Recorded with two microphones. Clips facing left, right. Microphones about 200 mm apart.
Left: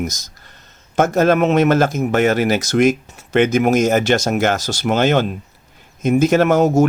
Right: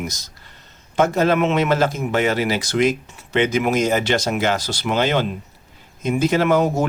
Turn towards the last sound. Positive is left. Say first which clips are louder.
# left 4 dB
turn(degrees=45)  # may be behind; listen again after turning